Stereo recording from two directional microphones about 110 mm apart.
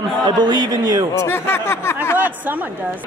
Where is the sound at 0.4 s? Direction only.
40° right (ahead or behind).